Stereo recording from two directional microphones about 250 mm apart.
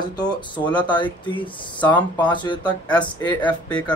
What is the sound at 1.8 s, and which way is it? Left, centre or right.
Speech, centre.